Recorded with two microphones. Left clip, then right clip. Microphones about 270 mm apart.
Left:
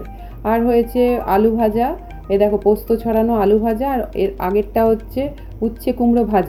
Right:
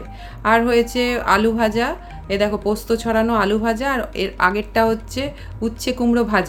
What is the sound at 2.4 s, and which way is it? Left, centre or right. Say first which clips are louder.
Speech: left 6 dB; right.